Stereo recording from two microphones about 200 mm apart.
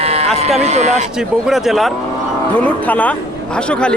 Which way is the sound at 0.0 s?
30° right (ahead or behind).